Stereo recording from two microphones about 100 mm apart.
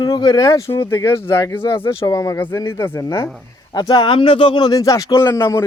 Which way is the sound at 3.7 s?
45° left (ahead or behind).